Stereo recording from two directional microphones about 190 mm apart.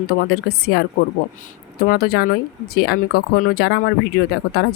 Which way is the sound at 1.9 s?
55° left (ahead or behind).